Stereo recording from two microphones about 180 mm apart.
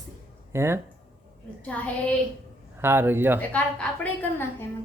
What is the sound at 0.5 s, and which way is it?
Speech, 15° right (ahead or behind).